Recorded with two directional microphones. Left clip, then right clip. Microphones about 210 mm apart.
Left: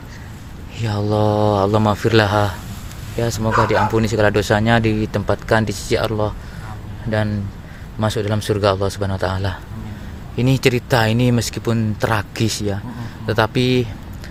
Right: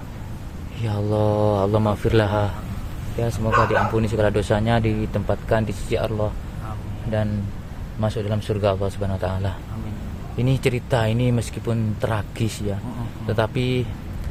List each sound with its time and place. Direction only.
0.8 s speech: 25° left (ahead or behind); by 6.3 s 45° left (ahead or behind)
8.0 s speech: 45° left (ahead or behind)